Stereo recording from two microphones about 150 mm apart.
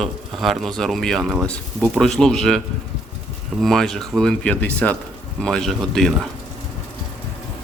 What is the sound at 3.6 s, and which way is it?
Speech, centre (ahead or behind).